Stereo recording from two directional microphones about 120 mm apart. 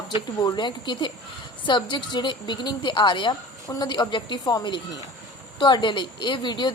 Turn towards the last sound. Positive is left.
turn(degrees=40)  # may be behind; listen again after turning